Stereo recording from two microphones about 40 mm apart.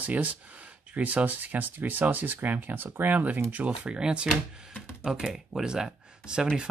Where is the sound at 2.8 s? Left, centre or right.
Right.